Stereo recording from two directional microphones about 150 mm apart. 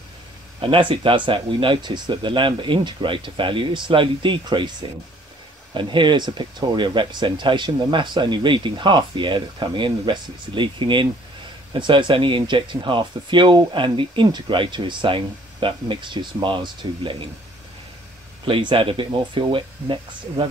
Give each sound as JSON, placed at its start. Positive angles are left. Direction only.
{"t": 0.6, "sound": "speech", "side_deg": -35}
{"t": 5.8, "sound": "speech", "side_deg": -30}
{"t": 18.4, "sound": "speech", "side_deg": -35}